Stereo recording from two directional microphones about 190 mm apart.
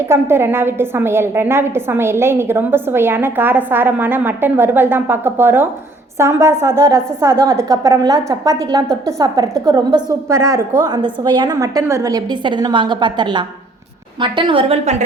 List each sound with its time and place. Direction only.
0.1 s a woman's voice: 10° right (ahead or behind); by 15.0 s 35° right (ahead or behind)